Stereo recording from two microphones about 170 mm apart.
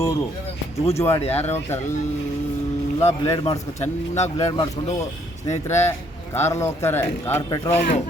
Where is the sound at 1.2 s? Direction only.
35° left (ahead or behind).